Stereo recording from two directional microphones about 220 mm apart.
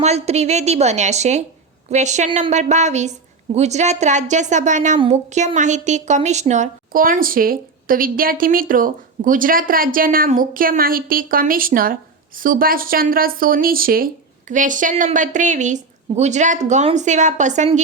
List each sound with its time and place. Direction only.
0.0 s a woman's voice: 30° right (ahead or behind)